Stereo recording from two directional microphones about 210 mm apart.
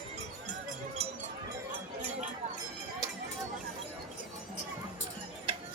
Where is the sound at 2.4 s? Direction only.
30° right (ahead or behind).